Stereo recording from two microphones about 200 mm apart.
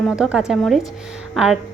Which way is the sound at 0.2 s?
5° right (ahead or behind).